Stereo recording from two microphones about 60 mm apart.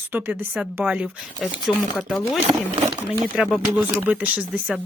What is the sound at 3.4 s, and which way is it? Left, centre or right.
Speech, centre.